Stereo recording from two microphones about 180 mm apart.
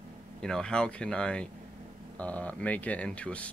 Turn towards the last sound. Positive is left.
turn(degrees=5)  # may be behind; listen again after turning